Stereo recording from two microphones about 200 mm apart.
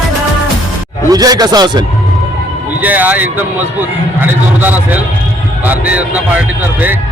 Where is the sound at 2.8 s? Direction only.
10° right (ahead or behind).